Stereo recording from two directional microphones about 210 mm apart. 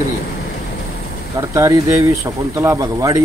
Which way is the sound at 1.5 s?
15° right (ahead or behind).